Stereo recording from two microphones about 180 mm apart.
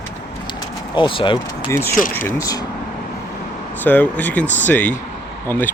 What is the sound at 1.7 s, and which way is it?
Speech, 15° left (ahead or behind).